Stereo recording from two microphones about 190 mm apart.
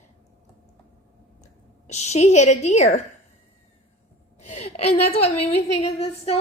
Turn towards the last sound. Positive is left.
turn(degrees=30)  # may be behind; listen again after turning